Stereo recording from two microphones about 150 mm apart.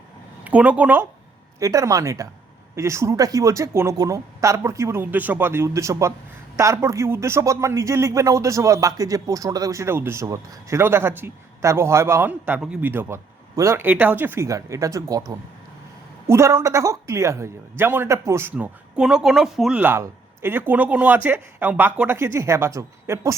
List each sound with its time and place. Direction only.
0.4 s speech: 10° right (ahead or behind)
1.5 s speech: 20° right (ahead or behind); by 19.8 s centre (ahead or behind)
19.8 s speech: 15° right (ahead or behind)